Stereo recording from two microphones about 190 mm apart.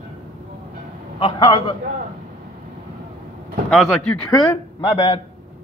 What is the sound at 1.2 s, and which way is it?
Speech, 25° left (ahead or behind).